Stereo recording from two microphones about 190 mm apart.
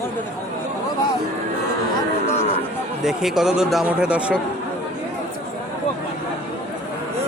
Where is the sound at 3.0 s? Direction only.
Centre (ahead or behind).